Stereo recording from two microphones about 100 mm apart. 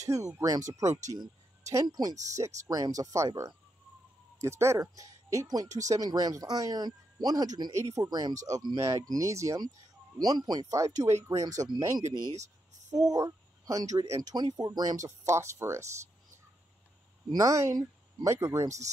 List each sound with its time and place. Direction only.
0.4 s speech: 35° right (ahead or behind)
10.1 s speech: 40° right (ahead or behind)
12.1 s speech: 45° right (ahead or behind)
14.3 s speech: 45° right (ahead or behind); by 15.9 s 30° right (ahead or behind)
17.3 s speech: 35° right (ahead or behind)